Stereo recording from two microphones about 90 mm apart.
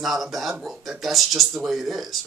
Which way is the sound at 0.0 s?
Centre (ahead or behind).